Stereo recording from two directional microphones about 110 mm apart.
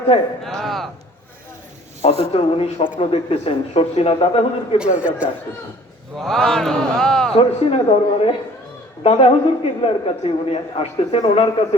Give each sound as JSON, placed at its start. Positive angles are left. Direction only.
{"t": 0.1, "sound": "a man's voice", "side_deg": 70}
{"t": 0.4, "sound": "speech", "side_deg": 0}
{"t": 2.0, "sound": "a man's voice", "side_deg": 70}
{"t": 4.9, "sound": "speech", "side_deg": -10}
{"t": 6.1, "sound": "speech", "side_deg": 5}
{"t": 7.3, "sound": "a man's voice", "side_deg": 55}